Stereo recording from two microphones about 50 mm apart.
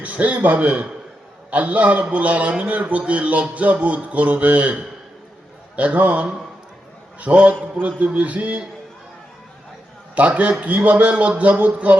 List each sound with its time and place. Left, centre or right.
0.0 s a man's voice: right
10.2 s a man's voice: right